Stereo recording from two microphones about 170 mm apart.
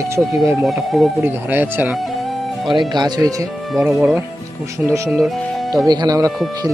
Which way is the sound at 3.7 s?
Centre (ahead or behind).